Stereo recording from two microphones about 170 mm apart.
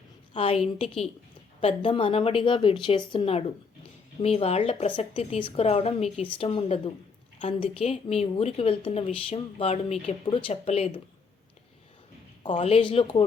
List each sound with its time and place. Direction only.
0.3 s a woman's voice: 35° left (ahead or behind)
12.4 s a woman's voice: 30° left (ahead or behind)